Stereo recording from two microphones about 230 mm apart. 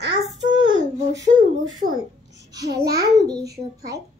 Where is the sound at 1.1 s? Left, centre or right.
Right.